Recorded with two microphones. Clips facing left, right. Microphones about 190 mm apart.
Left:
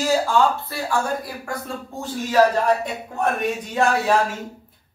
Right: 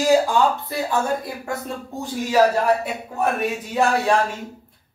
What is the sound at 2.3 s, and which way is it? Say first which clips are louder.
A woman's voice: even; 5° right (ahead or behind).